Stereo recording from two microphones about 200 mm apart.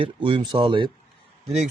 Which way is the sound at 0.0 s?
25° right (ahead or behind).